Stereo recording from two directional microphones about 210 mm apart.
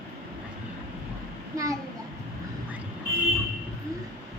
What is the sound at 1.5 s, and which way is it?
Speech, 15° right (ahead or behind).